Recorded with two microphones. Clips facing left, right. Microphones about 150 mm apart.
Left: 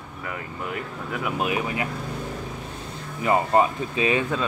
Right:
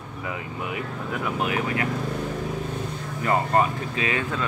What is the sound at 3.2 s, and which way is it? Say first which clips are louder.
Speech: left 2 dB; 20° left (ahead or behind).